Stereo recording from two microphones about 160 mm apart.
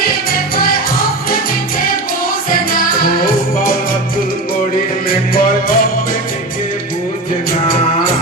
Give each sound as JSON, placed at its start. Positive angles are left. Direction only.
{"t": 0.0, "sound": "music", "side_deg": 70}
{"t": 3.2, "sound": "music", "side_deg": 60}
{"t": 5.0, "sound": "music", "side_deg": 65}